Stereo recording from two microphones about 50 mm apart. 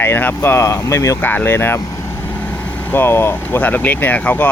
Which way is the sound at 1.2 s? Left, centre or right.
Left.